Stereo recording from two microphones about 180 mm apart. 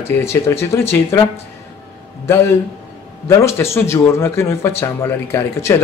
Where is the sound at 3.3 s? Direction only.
15° left (ahead or behind).